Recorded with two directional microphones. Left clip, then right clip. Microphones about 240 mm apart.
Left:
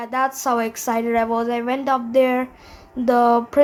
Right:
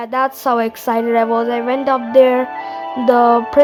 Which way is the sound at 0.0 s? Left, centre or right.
Right.